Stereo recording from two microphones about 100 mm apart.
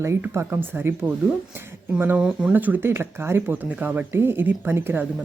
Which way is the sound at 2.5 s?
15° right (ahead or behind).